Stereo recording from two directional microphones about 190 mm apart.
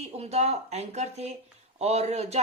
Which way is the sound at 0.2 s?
35° right (ahead or behind).